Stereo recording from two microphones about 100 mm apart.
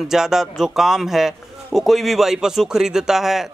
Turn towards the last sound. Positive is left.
turn(degrees=-5)  # may be behind; listen again after turning